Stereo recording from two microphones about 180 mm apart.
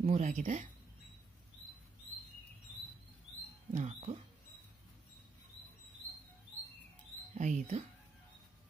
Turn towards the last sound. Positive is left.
turn(degrees=-40)  # may be behind; listen again after turning